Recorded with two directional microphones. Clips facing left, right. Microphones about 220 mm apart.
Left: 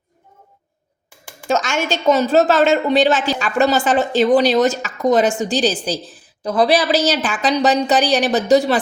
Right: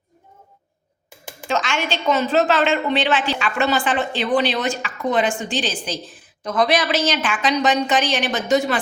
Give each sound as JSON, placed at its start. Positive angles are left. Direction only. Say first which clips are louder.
{"t": 1.5, "sound": "a woman's voice", "louder": "left 4 dB", "side_deg": 45}